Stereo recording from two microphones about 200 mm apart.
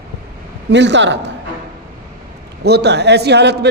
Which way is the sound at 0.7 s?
60° right (ahead or behind).